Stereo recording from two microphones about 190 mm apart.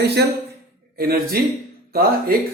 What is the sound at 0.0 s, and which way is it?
A man's voice, 60° right (ahead or behind).